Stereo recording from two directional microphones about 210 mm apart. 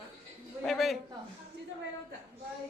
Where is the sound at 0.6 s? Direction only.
Centre (ahead or behind).